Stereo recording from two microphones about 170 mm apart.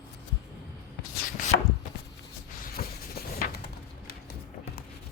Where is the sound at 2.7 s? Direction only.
65° left (ahead or behind).